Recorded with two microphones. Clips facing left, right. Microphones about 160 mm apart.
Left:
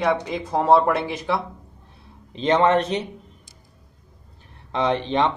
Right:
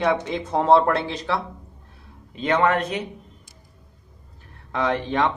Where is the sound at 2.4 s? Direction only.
30° left (ahead or behind).